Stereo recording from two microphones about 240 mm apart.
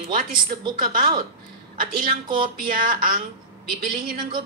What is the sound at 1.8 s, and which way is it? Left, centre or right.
A woman's voice, right.